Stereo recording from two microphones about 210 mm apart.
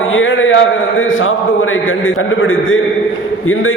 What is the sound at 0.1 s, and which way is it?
A man's voice, 65° left (ahead or behind).